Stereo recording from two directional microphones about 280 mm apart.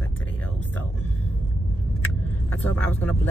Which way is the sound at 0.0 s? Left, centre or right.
Centre.